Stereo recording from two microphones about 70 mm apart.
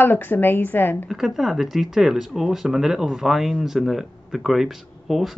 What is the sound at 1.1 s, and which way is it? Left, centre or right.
Speech, centre.